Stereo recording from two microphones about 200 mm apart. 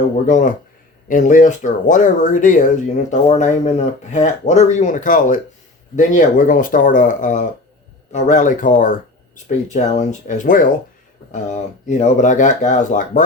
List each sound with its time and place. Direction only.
0.3 s speech: 40° left (ahead or behind)